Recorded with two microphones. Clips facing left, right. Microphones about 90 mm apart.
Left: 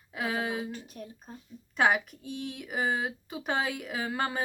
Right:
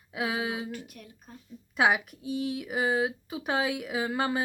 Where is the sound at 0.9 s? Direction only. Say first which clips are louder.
Left 6 dB; 35° left (ahead or behind).